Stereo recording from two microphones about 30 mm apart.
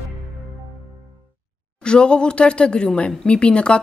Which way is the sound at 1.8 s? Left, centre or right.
Left.